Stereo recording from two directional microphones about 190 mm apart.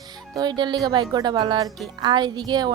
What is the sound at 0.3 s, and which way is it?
Speech, 20° right (ahead or behind).